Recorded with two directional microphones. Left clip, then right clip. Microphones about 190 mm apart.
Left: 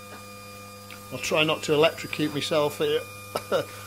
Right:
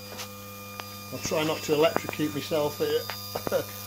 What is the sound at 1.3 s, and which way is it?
Speech, 25° left (ahead or behind).